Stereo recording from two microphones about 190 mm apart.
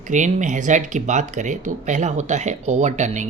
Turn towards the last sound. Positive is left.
turn(degrees=-40)  # may be behind; listen again after turning